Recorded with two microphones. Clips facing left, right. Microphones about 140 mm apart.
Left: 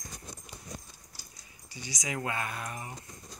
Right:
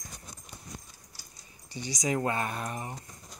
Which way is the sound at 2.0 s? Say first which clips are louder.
Right 5 dB; 35° right (ahead or behind).